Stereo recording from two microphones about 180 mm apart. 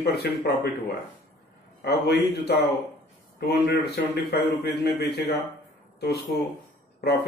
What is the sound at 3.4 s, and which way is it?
A man's voice, 65° left (ahead or behind).